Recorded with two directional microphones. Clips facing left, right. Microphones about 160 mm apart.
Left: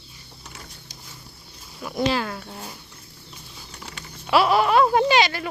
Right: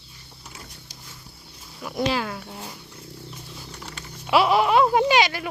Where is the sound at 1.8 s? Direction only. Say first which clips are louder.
Left 1 dB; 5° right (ahead or behind).